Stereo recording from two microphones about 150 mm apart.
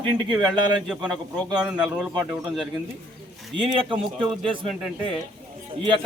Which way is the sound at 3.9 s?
10° right (ahead or behind).